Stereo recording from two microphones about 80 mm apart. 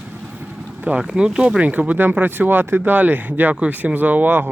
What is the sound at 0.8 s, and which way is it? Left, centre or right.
Speech, centre.